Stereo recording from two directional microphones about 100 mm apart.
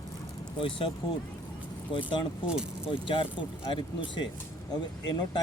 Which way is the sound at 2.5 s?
5° right (ahead or behind).